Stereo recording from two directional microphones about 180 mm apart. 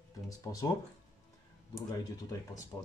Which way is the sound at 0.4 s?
20° left (ahead or behind).